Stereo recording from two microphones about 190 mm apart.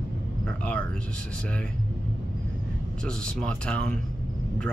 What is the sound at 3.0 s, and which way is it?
Speech, 5° left (ahead or behind).